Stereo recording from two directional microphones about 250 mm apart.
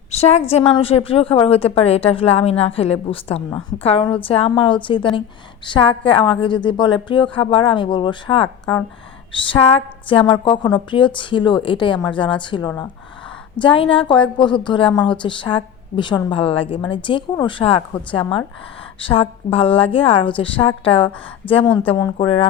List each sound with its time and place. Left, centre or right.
0.1 s a woman's voice: left